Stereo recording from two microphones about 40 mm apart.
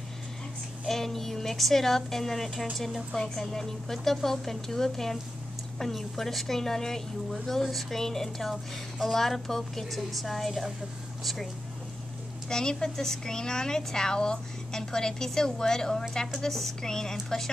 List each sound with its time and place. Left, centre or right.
0.8 s a woman's voice: centre
12.4 s a woman's voice: centre